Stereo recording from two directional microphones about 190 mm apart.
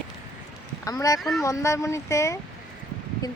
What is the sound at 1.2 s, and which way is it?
Speech, centre (ahead or behind).